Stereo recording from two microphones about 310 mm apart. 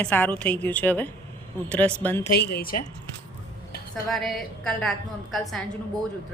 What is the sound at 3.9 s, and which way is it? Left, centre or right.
Speech, centre.